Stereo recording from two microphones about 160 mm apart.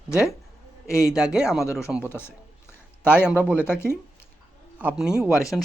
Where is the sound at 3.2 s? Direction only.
10° right (ahead or behind).